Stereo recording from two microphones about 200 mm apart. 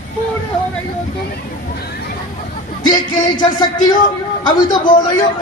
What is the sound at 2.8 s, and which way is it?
Music, 20° left (ahead or behind).